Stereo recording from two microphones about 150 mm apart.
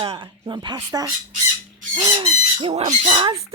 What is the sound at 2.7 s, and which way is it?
Speech, 50° right (ahead or behind).